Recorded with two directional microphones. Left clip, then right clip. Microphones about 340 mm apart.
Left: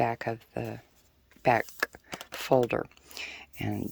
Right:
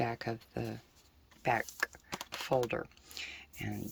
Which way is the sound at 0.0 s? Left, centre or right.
Centre.